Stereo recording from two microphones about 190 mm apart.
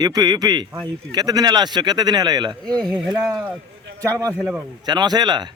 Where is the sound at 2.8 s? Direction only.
Centre (ahead or behind).